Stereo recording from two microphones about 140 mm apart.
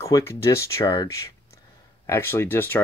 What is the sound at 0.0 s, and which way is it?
Speech, 20° left (ahead or behind).